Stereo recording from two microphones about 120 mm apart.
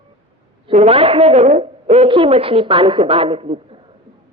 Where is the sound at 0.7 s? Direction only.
60° right (ahead or behind).